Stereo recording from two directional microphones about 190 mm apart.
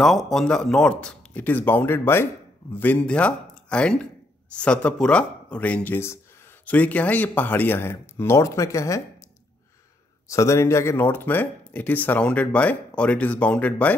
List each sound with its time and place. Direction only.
0.0 s speech: centre (ahead or behind)
10.2 s speech: 15° left (ahead or behind)